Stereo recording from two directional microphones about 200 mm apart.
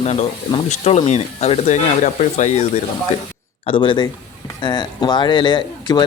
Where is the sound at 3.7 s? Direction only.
25° left (ahead or behind).